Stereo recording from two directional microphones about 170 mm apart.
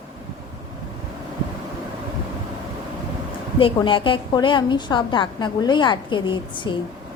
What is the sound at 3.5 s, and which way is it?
A woman's voice, 30° left (ahead or behind).